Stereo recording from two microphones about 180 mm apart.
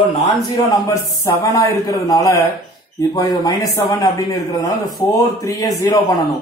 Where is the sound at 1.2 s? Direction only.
15° left (ahead or behind).